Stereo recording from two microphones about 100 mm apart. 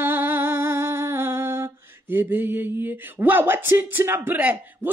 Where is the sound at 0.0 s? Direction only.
20° right (ahead or behind).